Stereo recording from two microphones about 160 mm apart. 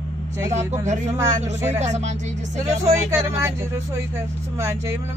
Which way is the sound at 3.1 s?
15° right (ahead or behind).